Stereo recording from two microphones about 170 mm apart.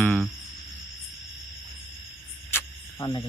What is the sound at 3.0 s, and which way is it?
Speech, 25° left (ahead or behind).